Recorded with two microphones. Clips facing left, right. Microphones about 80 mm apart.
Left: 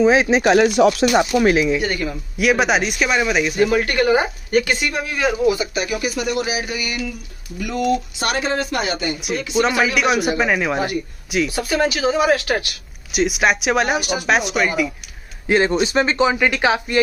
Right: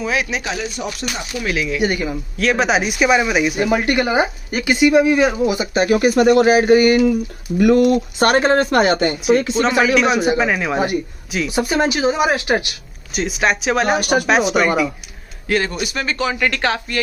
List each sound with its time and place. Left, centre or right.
0.0 s speech: left
0.4 s speech: left
1.4 s speech: left
1.8 s speech: centre
2.3 s speech: centre
3.5 s speech: centre
5.8 s speech: right
7.5 s speech: right
9.8 s speech: centre
11.4 s speech: right
13.1 s speech: centre
13.9 s speech: right
14.2 s speech: centre
15.4 s speech: left